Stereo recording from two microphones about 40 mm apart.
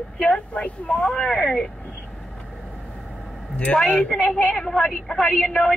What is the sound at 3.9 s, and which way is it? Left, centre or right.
Speech, left.